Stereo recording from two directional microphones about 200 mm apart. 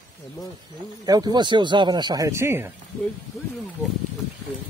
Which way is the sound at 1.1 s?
20° right (ahead or behind).